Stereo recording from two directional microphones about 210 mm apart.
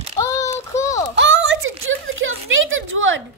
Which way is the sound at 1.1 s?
55° right (ahead or behind).